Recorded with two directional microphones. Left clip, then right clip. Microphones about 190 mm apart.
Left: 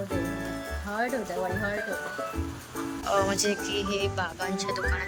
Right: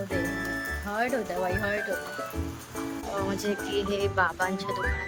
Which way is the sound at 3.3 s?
5° right (ahead or behind).